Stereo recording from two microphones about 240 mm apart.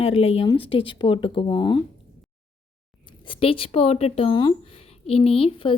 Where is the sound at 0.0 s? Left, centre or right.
Left.